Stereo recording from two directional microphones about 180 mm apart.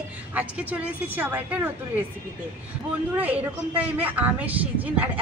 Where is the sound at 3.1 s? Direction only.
10° right (ahead or behind).